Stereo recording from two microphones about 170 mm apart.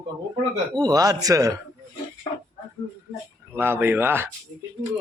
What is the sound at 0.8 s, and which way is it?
Speech, 20° right (ahead or behind).